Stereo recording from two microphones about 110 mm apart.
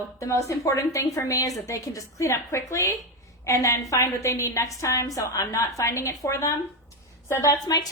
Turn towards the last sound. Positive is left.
turn(degrees=35)  # may be behind; listen again after turning